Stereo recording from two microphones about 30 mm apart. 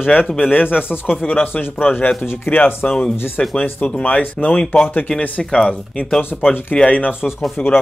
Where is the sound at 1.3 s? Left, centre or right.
Left.